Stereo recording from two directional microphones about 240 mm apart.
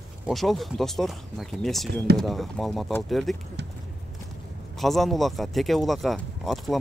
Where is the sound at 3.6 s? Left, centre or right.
Right.